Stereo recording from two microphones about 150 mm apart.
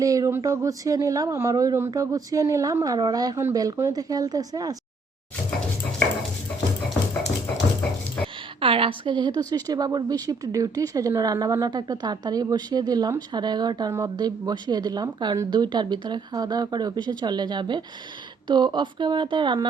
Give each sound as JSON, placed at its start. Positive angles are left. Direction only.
{"t": 0.0, "sound": "speech", "side_deg": -25}
{"t": 8.6, "sound": "speech", "side_deg": -35}